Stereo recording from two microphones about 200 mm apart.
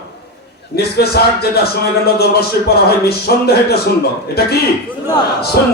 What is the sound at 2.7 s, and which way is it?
Speech, 50° left (ahead or behind).